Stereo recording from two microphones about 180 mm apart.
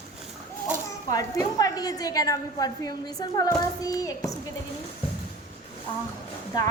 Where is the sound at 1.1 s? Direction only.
20° left (ahead or behind).